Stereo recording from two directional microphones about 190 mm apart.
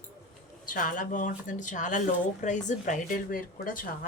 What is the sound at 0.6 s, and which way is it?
Speech, 45° left (ahead or behind).